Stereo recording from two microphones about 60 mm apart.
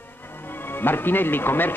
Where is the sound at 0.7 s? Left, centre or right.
Left.